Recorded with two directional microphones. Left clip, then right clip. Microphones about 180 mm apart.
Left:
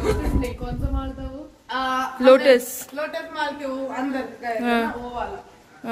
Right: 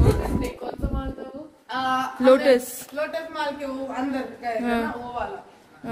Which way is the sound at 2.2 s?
10° right (ahead or behind).